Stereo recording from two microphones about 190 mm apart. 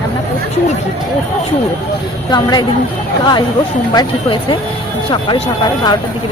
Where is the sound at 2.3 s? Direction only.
20° left (ahead or behind).